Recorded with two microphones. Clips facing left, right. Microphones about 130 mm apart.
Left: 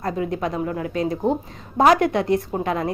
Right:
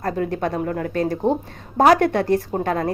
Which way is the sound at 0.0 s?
55° right (ahead or behind).